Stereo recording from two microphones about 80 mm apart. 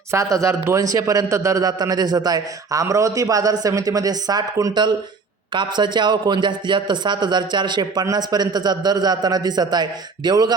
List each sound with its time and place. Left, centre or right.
0.1 s a man's voice: right
4.7 s a man's voice: right